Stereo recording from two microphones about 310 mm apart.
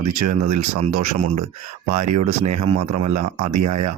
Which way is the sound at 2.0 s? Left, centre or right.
Right.